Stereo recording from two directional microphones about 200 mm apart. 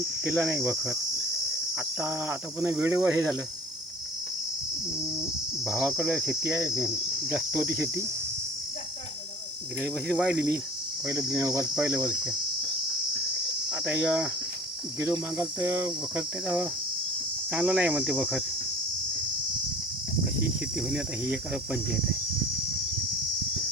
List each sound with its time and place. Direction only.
0.3 s speech: 10° right (ahead or behind)
5.6 s speech: centre (ahead or behind)
6.4 s speech: 15° right (ahead or behind)
9.8 s speech: 5° right (ahead or behind)
11.0 s cricket: 15° right (ahead or behind)
11.3 s speech: 15° right (ahead or behind)
11.7 s speech: 5° right (ahead or behind)
13.7 s cricket: 5° right (ahead or behind)
15.0 s speech: 15° right (ahead or behind)
20.7 s speech: 5° right (ahead or behind)